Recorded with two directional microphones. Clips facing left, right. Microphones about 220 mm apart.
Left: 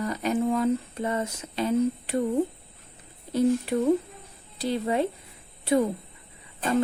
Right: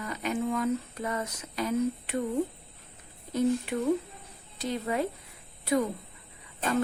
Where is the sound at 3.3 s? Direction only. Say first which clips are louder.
Left 4 dB; 30° left (ahead or behind).